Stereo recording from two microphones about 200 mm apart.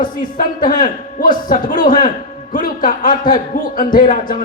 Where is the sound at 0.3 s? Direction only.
45° left (ahead or behind).